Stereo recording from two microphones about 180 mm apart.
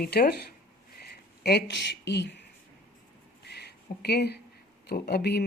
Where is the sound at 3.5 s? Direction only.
65° left (ahead or behind).